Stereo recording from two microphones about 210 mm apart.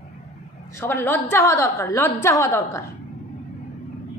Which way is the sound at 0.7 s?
10° left (ahead or behind).